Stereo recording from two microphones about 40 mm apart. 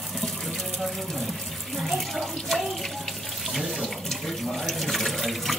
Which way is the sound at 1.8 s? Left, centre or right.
Centre.